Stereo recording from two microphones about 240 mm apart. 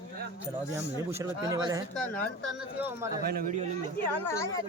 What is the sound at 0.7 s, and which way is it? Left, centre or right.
Speech, centre.